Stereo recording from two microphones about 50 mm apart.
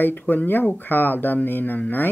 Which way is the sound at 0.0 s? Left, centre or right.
Left.